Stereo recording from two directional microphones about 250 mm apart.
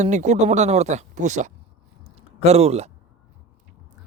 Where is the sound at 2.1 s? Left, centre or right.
Right.